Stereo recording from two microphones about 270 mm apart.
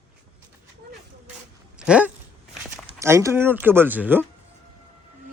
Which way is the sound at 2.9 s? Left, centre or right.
Centre.